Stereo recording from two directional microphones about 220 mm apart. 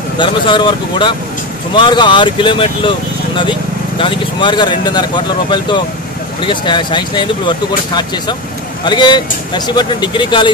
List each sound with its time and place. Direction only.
0.2 s speech: 20° left (ahead or behind)
8.8 s speech: 20° left (ahead or behind)